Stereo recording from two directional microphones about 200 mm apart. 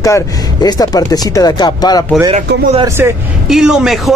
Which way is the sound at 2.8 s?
10° right (ahead or behind).